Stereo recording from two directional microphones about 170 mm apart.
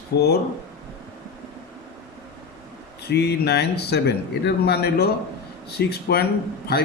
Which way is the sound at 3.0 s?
70° left (ahead or behind).